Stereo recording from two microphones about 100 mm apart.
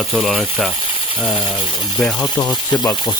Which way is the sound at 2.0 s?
10° left (ahead or behind).